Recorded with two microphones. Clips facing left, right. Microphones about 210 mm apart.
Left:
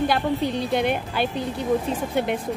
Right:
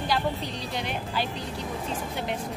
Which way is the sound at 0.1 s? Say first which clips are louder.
Left 6 dB; 55° left (ahead or behind).